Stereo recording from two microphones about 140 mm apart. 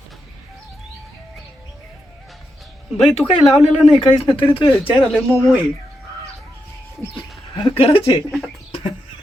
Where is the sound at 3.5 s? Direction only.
45° left (ahead or behind).